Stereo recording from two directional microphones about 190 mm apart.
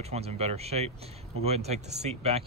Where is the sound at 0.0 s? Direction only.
35° right (ahead or behind).